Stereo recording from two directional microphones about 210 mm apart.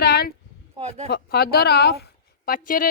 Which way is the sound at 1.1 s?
50° left (ahead or behind).